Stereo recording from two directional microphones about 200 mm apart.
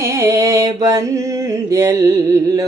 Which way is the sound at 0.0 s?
15° right (ahead or behind).